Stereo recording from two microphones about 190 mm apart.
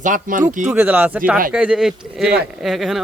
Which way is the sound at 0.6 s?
5° right (ahead or behind).